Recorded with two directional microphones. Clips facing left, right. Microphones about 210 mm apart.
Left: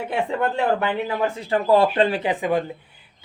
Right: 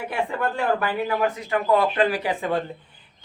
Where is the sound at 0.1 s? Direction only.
25° left (ahead or behind).